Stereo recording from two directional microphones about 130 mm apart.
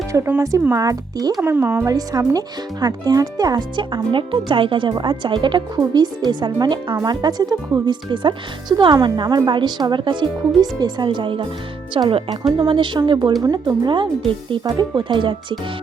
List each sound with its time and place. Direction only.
0.1 s speech: 20° right (ahead or behind)
1.4 s speech: 15° right (ahead or behind)
1.9 s speech: 30° right (ahead or behind)